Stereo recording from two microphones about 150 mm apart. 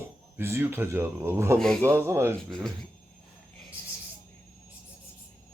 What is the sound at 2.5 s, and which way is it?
Speech, centre (ahead or behind).